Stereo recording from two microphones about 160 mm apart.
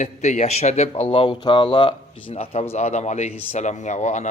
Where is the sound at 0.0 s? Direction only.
50° left (ahead or behind).